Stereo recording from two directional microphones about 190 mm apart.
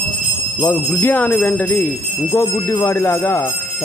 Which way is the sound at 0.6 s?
15° left (ahead or behind).